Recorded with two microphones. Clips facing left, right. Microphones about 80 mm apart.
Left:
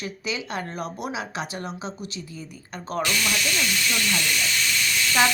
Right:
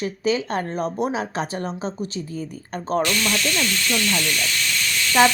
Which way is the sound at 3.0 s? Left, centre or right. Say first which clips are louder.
Right 2 dB; centre.